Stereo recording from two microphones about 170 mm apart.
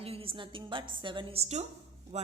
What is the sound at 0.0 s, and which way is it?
A woman's voice, 35° right (ahead or behind).